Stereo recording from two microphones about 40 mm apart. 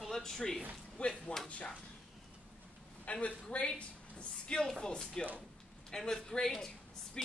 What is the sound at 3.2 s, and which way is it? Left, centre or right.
Speech, left.